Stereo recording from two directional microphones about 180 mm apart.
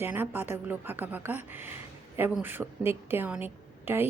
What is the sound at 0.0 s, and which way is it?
A woman's voice, 10° right (ahead or behind).